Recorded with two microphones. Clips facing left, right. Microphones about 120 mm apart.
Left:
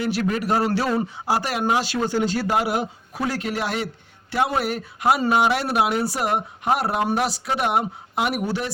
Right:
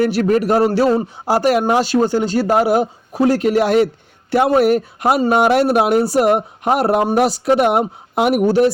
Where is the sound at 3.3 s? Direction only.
55° right (ahead or behind).